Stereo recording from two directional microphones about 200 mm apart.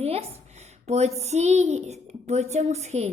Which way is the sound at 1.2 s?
35° right (ahead or behind).